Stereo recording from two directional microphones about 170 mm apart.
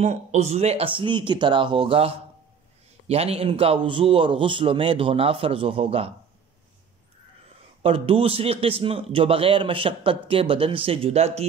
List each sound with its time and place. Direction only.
0.0 s a man's voice: 45° right (ahead or behind)
7.8 s a man's voice: 35° right (ahead or behind)